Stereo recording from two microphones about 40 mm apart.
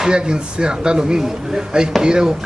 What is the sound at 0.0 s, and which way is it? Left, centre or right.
Speech, right.